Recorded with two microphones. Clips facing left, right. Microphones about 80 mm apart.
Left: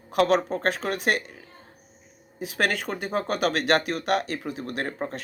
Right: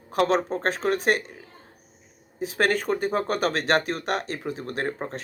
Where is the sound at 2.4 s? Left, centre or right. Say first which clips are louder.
Right 3 dB; right.